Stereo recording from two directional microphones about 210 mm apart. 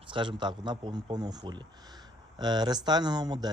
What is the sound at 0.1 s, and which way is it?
Speech, 20° right (ahead or behind).